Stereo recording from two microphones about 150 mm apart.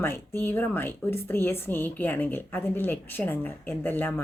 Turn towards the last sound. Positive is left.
turn(degrees=15)  # may be behind; listen again after turning